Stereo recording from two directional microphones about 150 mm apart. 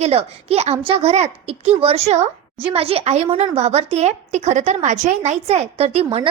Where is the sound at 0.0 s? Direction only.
45° right (ahead or behind).